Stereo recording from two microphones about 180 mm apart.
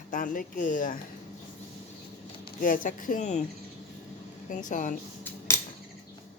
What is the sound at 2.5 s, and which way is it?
Speech, 50° left (ahead or behind).